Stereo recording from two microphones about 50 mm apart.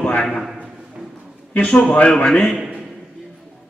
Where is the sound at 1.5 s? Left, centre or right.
Left.